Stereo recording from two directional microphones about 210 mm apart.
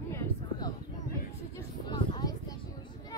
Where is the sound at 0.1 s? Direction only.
20° left (ahead or behind).